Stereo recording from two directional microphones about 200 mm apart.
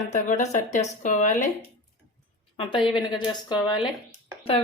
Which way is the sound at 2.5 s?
25° left (ahead or behind).